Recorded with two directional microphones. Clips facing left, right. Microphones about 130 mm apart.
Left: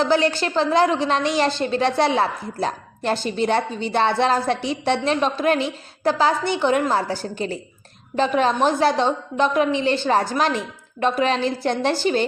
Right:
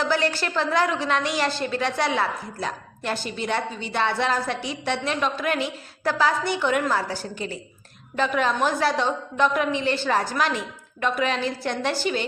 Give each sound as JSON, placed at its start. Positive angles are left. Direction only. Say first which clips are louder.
{"t": 0.0, "sound": "a woman's voice", "louder": "left 5 dB", "side_deg": 25}